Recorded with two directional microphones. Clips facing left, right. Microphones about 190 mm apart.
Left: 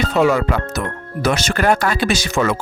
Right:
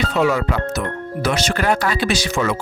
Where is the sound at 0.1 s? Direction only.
50° left (ahead or behind).